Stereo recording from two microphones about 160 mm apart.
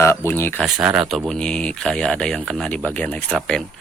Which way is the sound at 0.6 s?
5° right (ahead or behind).